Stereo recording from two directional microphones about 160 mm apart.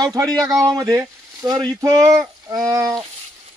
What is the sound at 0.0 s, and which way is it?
Speech, 25° right (ahead or behind).